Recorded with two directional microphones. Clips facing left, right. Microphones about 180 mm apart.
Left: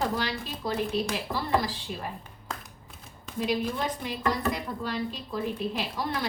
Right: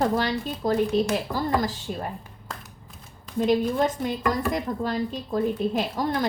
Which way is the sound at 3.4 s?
45° right (ahead or behind).